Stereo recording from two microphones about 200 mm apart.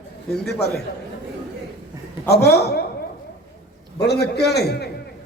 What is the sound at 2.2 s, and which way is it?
Speech, 55° left (ahead or behind).